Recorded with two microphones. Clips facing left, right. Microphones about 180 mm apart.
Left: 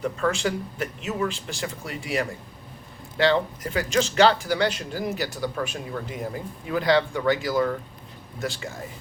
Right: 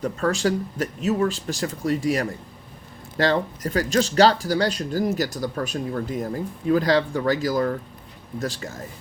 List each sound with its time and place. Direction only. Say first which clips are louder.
0.0 s speech: right 2 dB; 40° right (ahead or behind)